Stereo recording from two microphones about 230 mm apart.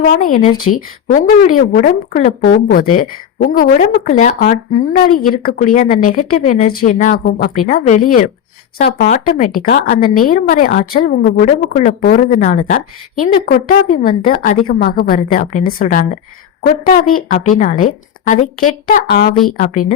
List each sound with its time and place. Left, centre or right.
0.3 s speech: left
0.5 s speech: left
1.4 s a woman's voice: left